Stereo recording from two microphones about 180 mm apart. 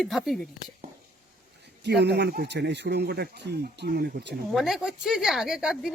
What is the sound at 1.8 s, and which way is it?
Speech, 70° right (ahead or behind).